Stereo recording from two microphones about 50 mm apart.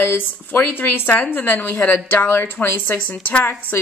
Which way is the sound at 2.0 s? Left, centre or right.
Left.